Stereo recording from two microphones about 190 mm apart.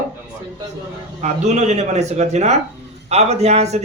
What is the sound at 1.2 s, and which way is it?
Speech, 35° right (ahead or behind).